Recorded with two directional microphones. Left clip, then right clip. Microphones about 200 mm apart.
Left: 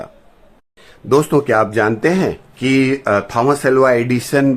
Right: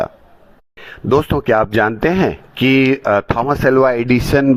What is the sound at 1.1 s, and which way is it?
Speech, 40° right (ahead or behind).